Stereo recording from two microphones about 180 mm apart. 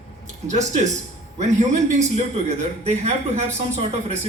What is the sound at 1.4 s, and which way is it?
Speech, 40° right (ahead or behind).